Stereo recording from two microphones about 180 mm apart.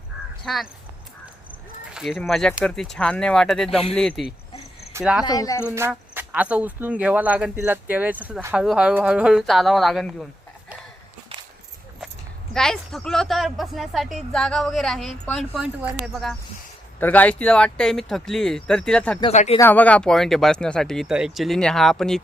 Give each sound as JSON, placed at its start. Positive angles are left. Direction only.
{"t": 0.4, "sound": "speech", "side_deg": 0}
{"t": 1.9, "sound": "speech", "side_deg": 0}
{"t": 5.2, "sound": "speech", "side_deg": 20}
{"t": 5.6, "sound": "speech", "side_deg": -15}
{"t": 12.5, "sound": "speech", "side_deg": 0}
{"t": 17.0, "sound": "speech", "side_deg": 10}
{"t": 19.3, "sound": "speech", "side_deg": 40}
{"t": 19.5, "sound": "speech", "side_deg": 10}